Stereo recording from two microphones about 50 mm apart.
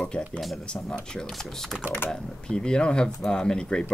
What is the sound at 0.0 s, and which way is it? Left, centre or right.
Speech, left.